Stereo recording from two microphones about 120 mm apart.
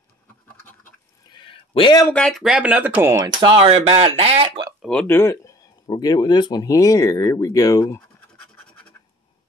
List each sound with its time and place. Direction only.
1.3 s a sound: 45° left (ahead or behind)
2.3 s speech: 5° right (ahead or behind)
3.3 s speech: 50° right (ahead or behind)
5.0 s speech: 20° left (ahead or behind)